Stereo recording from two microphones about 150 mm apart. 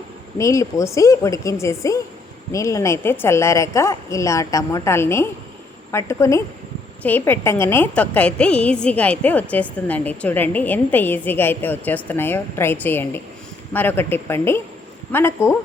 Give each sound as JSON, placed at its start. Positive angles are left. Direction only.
{"t": 0.3, "sound": "a woman's voice", "side_deg": 20}